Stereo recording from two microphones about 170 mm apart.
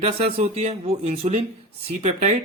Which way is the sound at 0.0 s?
35° right (ahead or behind).